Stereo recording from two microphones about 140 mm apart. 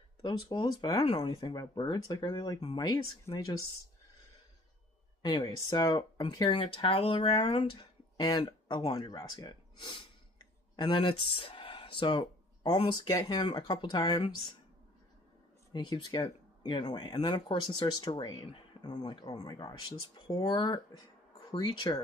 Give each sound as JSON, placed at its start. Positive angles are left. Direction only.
{"t": 0.2, "sound": "speech", "side_deg": 30}
{"t": 5.2, "sound": "speech", "side_deg": 30}
{"t": 8.2, "sound": "speech", "side_deg": 30}
{"t": 11.3, "sound": "a sound", "side_deg": 40}
{"t": 12.7, "sound": "speech", "side_deg": 35}
{"t": 15.7, "sound": "speech", "side_deg": 30}
{"t": 17.6, "sound": "speech", "side_deg": 40}
{"t": 18.2, "sound": "speech", "side_deg": 30}